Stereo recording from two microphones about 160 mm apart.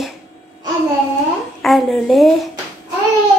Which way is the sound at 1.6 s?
Centre (ahead or behind).